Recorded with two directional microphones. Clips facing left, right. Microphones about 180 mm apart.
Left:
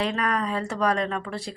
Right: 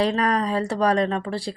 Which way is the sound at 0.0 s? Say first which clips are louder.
Right 5 dB; 35° right (ahead or behind).